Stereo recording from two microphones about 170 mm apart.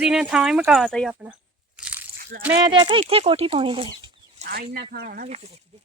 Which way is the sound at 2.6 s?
25° right (ahead or behind).